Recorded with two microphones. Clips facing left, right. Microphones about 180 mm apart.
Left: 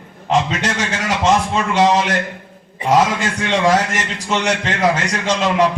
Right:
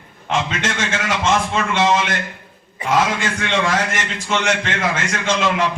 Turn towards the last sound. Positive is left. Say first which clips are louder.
# left 3 dB
turn(degrees=40)  # may be behind; listen again after turning